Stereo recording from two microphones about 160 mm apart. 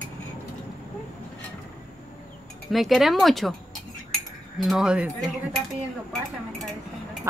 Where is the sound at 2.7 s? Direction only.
Centre (ahead or behind).